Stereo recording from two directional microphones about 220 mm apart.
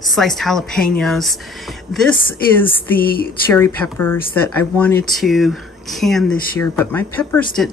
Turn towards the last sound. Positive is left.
turn(degrees=5)  # may be behind; listen again after turning